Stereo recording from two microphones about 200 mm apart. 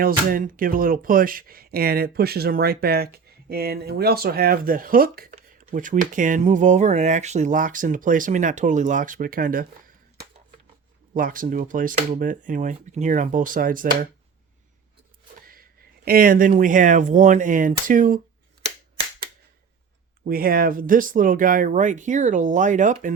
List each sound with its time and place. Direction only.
0.0 s speech: 45° right (ahead or behind)
11.1 s speech: 45° right (ahead or behind)
16.0 s speech: 45° right (ahead or behind)
20.2 s speech: 45° right (ahead or behind)